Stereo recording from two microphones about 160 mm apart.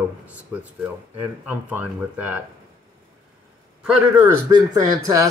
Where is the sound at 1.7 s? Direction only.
10° right (ahead or behind).